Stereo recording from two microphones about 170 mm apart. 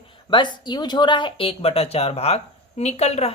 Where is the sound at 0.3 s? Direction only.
25° left (ahead or behind).